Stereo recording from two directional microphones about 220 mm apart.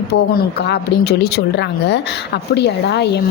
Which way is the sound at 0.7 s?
50° left (ahead or behind).